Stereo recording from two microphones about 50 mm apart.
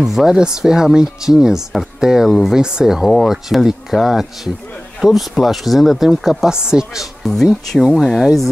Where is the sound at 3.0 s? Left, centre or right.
Centre.